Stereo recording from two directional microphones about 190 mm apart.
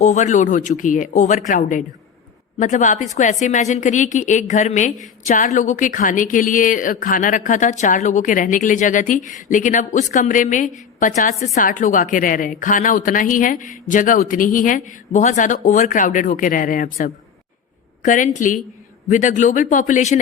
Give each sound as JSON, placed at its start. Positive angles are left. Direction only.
{"t": 0.0, "sound": "a woman's voice", "side_deg": 40}